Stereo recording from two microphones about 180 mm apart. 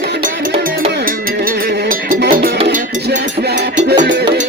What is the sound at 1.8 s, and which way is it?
Music, 50° right (ahead or behind).